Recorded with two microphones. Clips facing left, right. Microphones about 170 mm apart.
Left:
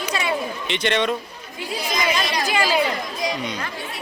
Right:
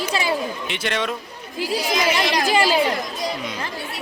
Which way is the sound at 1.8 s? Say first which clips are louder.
Right 1 dB; 65° right (ahead or behind).